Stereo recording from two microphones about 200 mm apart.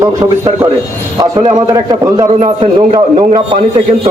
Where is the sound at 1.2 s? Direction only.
15° right (ahead or behind).